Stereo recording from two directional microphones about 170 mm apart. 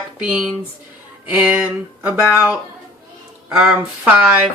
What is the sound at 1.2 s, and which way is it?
Speech, 10° right (ahead or behind).